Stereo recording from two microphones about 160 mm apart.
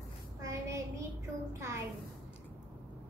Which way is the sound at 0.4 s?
20° right (ahead or behind).